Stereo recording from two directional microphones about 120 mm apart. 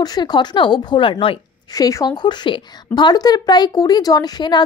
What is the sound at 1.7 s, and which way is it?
Speech, 30° left (ahead or behind).